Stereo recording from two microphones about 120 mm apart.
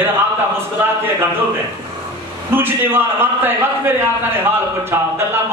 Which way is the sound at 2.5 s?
20° right (ahead or behind).